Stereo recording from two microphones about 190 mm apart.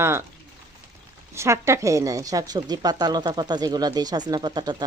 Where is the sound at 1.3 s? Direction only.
15° right (ahead or behind).